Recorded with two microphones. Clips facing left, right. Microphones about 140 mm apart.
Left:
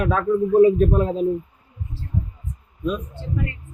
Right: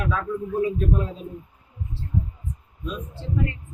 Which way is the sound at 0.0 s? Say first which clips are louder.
Left 7 dB; 50° left (ahead or behind).